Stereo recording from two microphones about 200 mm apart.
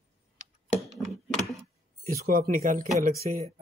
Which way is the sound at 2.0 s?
45° right (ahead or behind).